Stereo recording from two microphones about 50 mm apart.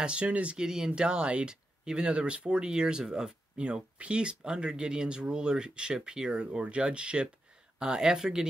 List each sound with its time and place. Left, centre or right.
0.0 s speech: right
0.6 s speech: centre